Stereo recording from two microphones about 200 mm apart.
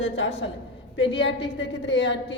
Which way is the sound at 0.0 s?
65° left (ahead or behind).